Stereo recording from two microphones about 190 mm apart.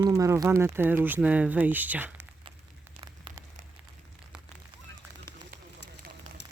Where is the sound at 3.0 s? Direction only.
25° right (ahead or behind).